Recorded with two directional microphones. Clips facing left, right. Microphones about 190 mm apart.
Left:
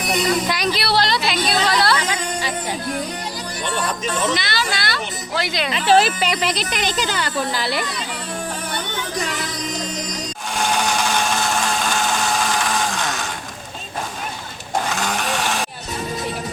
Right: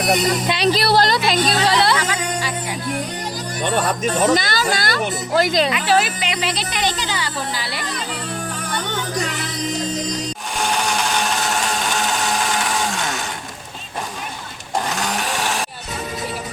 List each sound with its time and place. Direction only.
0.1 s speech: 40° right (ahead or behind)
0.4 s speech: 25° right (ahead or behind)
0.7 s a woman's voice: 45° right (ahead or behind)
1.7 s speech: 20° right (ahead or behind)
3.6 s speech: 55° right (ahead or behind)
4.1 s speech: 40° right (ahead or behind)
5.7 s speech: 30° left (ahead or behind)
7.1 s speech: 50° left (ahead or behind)
8.7 s music: 40° right (ahead or behind)